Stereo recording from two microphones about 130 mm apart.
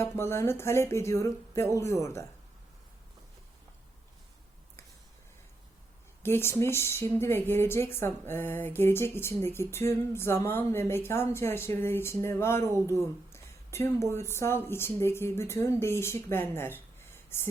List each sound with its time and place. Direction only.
0.0 s speech: 20° left (ahead or behind)
6.2 s speech: 15° left (ahead or behind)
12.9 s a sound: 20° left (ahead or behind)
14.1 s speech: 20° left (ahead or behind)